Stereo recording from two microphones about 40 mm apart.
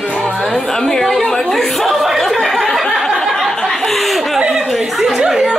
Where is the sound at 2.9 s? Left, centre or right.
Centre.